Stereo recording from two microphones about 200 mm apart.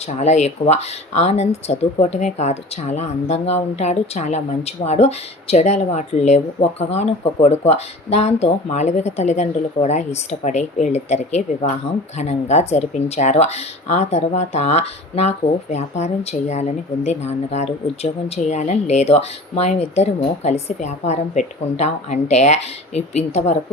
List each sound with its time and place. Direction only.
0.2 s speech: 35° left (ahead or behind)